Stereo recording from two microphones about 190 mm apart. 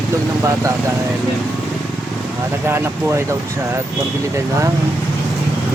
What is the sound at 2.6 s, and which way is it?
Speech, 10° right (ahead or behind).